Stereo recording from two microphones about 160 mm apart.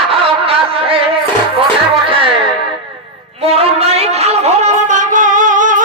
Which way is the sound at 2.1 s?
35° right (ahead or behind).